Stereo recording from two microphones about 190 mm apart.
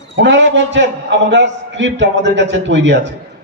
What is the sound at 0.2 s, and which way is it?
A man's voice, 70° right (ahead or behind).